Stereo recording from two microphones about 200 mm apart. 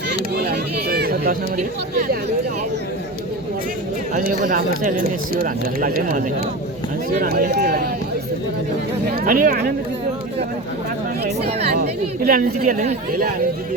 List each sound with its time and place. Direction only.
0.3 s a sound: 50° right (ahead or behind)
4.1 s speech: 45° right (ahead or behind)
9.2 s speech: 45° right (ahead or behind)
11.7 s a woman's voice: 45° right (ahead or behind)